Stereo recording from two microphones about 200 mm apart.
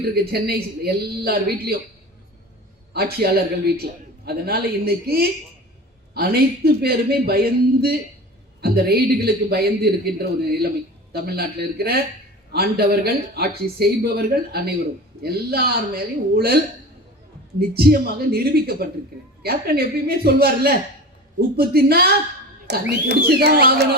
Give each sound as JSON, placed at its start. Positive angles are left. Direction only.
{"t": 0.3, "sound": "a man's voice", "side_deg": -50}
{"t": 2.9, "sound": "a man's voice", "side_deg": -50}
{"t": 17.7, "sound": "a man's voice", "side_deg": -50}